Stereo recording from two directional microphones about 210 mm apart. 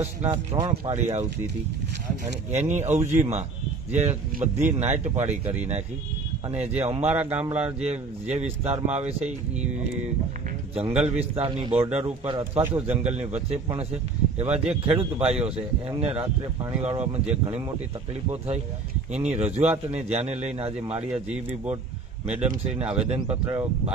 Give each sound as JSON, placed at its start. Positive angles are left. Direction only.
{"t": 0.0, "sound": "speech", "side_deg": -30}
{"t": 2.5, "sound": "speech", "side_deg": -35}
{"t": 6.9, "sound": "speech", "side_deg": -30}
{"t": 7.2, "sound": "speech", "side_deg": -5}
{"t": 7.4, "sound": "speech", "side_deg": -30}
{"t": 10.7, "sound": "speech", "side_deg": -30}
{"t": 19.1, "sound": "speech", "side_deg": -30}
{"t": 21.1, "sound": "speech", "side_deg": -5}
{"t": 22.3, "sound": "speech", "side_deg": -30}
{"t": 23.1, "sound": "speech", "side_deg": -5}
{"t": 23.4, "sound": "speech", "side_deg": -20}